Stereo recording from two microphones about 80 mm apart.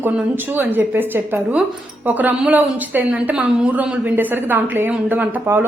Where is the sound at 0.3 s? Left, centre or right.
Right.